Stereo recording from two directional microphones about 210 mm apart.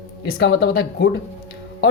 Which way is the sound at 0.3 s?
50° left (ahead or behind).